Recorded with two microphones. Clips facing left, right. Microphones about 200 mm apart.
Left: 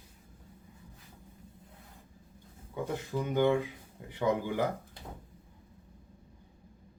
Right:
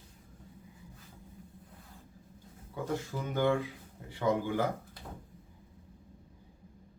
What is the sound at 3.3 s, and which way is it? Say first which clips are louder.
Speech: left 2 dB; 20° left (ahead or behind).